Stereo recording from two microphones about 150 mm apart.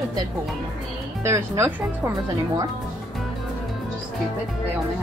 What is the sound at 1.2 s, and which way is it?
Speech, 20° right (ahead or behind).